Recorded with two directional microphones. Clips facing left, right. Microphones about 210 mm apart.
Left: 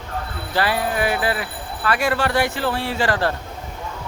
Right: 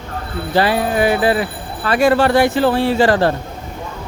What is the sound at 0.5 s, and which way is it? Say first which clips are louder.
Speech: right 6 dB; 25° right (ahead or behind).